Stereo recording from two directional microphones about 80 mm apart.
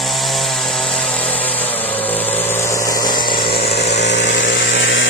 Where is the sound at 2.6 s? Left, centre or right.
Left.